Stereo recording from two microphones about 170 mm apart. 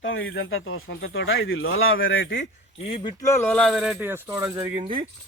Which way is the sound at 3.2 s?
15° left (ahead or behind).